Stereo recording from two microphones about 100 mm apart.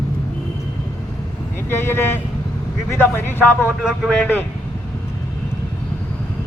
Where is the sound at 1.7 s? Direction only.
25° left (ahead or behind).